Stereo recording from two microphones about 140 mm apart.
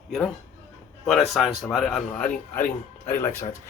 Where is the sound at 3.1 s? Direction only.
20° left (ahead or behind).